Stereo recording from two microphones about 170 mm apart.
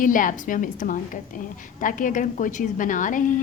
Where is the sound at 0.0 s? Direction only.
50° left (ahead or behind).